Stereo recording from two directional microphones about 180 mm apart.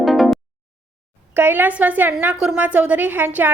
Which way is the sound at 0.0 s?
Centre (ahead or behind).